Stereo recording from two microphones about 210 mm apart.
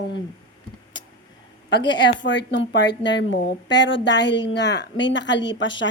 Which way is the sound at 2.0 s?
55° left (ahead or behind).